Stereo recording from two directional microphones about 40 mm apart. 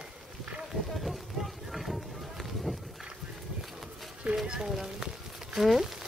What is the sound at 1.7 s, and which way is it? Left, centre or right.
Run, centre.